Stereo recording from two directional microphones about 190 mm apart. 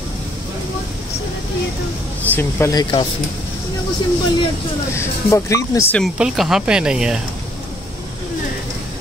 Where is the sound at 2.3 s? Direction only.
15° left (ahead or behind).